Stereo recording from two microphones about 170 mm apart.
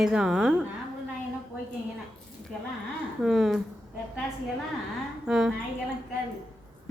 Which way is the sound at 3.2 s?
Centre (ahead or behind).